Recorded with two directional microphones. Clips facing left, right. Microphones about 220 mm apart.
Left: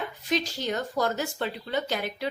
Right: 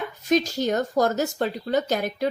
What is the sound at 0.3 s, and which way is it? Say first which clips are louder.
A woman's voice: right 7 dB; 45° right (ahead or behind).